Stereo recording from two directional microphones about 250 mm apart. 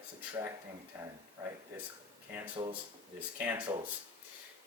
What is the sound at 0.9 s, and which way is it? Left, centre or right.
Speech, centre.